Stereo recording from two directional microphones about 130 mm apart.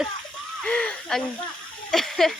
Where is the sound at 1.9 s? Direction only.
Centre (ahead or behind).